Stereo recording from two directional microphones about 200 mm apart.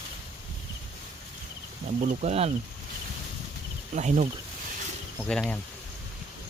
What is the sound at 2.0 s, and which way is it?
Speech, 35° right (ahead or behind).